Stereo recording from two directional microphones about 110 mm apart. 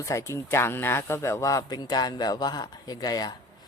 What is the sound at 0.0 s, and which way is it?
Speech, 30° left (ahead or behind).